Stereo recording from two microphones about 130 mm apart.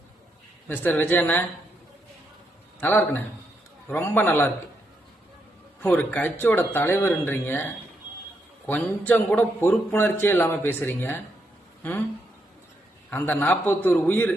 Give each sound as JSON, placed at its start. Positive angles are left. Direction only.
{"t": 0.7, "sound": "a man's voice", "side_deg": 15}
{"t": 2.8, "sound": "a man's voice", "side_deg": 15}
{"t": 5.8, "sound": "a man's voice", "side_deg": 10}
{"t": 13.1, "sound": "a man's voice", "side_deg": 15}